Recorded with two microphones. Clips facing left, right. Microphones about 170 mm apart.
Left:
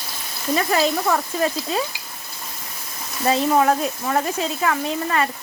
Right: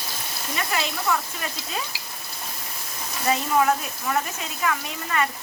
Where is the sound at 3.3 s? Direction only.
40° left (ahead or behind).